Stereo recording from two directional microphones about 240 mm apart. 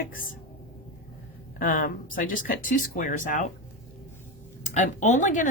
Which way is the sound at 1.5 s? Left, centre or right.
Left.